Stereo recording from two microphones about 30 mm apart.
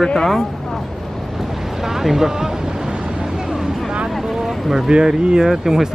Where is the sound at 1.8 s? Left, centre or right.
Centre.